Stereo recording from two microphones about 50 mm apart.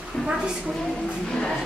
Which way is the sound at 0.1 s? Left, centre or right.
Centre.